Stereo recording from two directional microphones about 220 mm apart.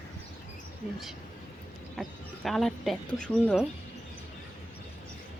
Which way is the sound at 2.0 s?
Centre (ahead or behind).